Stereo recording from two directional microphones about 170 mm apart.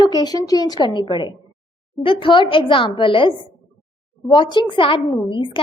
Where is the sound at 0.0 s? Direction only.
25° left (ahead or behind).